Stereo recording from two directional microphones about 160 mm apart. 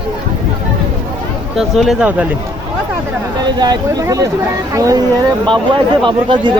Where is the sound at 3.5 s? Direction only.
25° right (ahead or behind).